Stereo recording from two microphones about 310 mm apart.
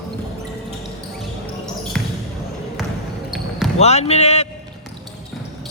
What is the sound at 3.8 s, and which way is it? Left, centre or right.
Speech, centre.